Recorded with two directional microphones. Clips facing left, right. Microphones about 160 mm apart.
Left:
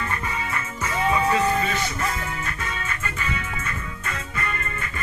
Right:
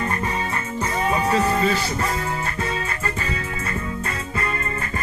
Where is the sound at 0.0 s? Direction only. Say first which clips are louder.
Right 4 dB; 35° right (ahead or behind).